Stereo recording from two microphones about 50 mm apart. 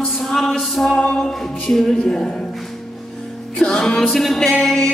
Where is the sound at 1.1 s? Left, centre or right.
Centre.